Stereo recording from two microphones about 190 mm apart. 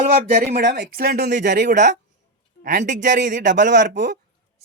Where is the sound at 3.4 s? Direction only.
70° right (ahead or behind).